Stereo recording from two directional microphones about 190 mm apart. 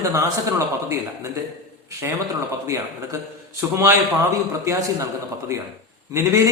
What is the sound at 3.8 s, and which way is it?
A man's voice, 15° right (ahead or behind).